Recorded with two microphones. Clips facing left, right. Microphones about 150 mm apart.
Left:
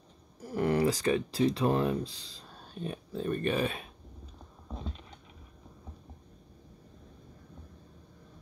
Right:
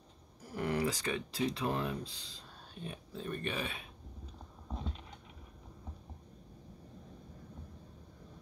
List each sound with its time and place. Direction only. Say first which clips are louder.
0.6 s speech: left 7 dB; 40° left (ahead or behind)